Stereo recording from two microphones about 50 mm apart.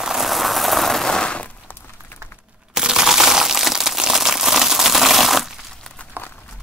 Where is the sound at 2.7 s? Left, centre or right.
Centre.